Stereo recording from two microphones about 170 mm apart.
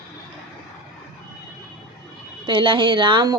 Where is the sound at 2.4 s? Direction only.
30° right (ahead or behind).